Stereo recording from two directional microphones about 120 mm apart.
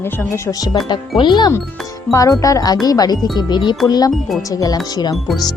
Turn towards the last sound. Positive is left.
turn(degrees=30)  # may be behind; listen again after turning